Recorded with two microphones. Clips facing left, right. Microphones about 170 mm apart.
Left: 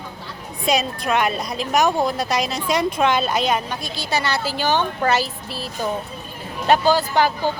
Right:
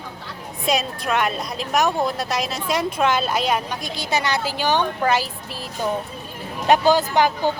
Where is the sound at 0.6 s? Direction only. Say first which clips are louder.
Left 2 dB; centre (ahead or behind).